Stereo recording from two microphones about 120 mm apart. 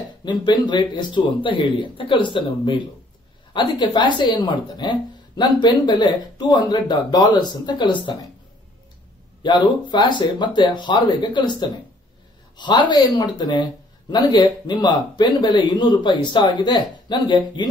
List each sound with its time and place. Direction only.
0.2 s speech: 40° left (ahead or behind)
9.4 s speech: 40° left (ahead or behind)